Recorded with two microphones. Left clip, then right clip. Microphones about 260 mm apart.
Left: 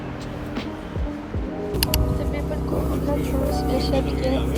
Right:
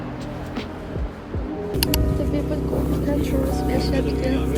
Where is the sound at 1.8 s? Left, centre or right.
Centre.